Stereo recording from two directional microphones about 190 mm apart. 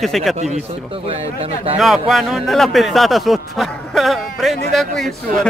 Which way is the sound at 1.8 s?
Centre (ahead or behind).